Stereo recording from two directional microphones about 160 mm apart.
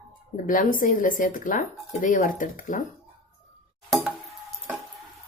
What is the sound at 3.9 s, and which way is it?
Music, 5° right (ahead or behind).